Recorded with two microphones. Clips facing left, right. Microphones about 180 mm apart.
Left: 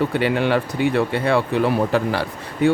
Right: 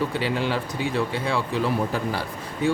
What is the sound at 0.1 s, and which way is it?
Speech, 60° left (ahead or behind).